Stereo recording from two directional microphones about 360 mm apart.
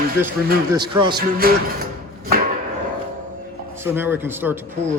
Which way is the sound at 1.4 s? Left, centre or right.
Right.